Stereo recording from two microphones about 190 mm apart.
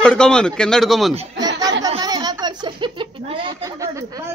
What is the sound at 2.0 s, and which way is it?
Speech, 20° right (ahead or behind).